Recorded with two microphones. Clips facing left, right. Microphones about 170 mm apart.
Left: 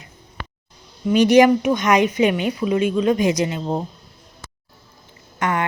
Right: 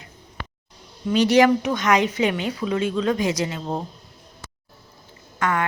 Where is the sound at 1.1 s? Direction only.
15° left (ahead or behind).